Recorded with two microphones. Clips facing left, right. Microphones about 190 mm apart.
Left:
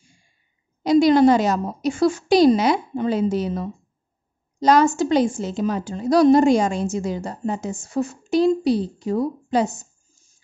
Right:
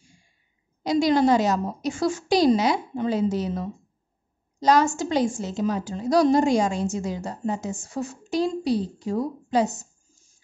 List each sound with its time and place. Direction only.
0.8 s a woman's voice: 60° left (ahead or behind)